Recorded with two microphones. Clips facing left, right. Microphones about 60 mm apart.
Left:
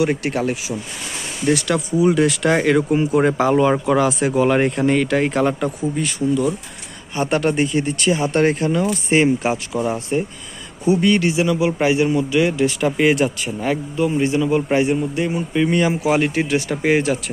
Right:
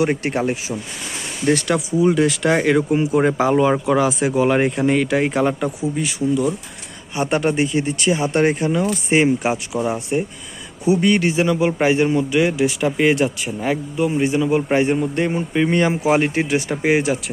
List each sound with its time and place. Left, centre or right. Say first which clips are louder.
0.0 s speech: even; right
1.5 s speech: even; right
1.9 s speech: left 1 dB; centre
12.8 s speech: left 1 dB; centre; by 14.8 s right
14.9 s a man's voice: right 1 dB; right
15.4 s speech: left 1 dB; right; by 17.2 s centre